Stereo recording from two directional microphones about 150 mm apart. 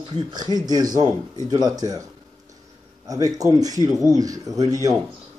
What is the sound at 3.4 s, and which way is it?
Speech, 25° right (ahead or behind).